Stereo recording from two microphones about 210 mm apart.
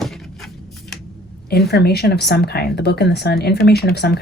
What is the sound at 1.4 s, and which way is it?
Speech, 50° left (ahead or behind).